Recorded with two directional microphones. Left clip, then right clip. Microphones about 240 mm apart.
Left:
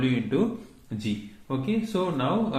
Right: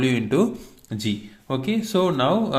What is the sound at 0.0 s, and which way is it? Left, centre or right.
Speech, right.